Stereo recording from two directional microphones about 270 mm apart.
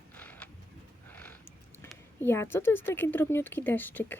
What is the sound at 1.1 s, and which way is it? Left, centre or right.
Speech, centre.